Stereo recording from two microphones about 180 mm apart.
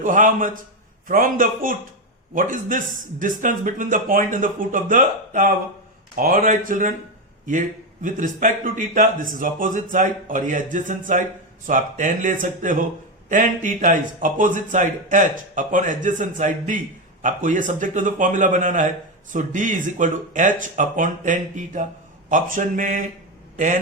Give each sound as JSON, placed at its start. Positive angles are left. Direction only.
{"t": 0.0, "sound": "speech", "side_deg": -45}
{"t": 8.0, "sound": "speech", "side_deg": -45}